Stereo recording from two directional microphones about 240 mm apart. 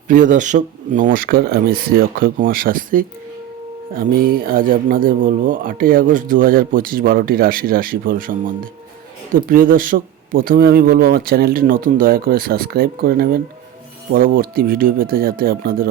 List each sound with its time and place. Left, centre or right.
0.1 s speech: right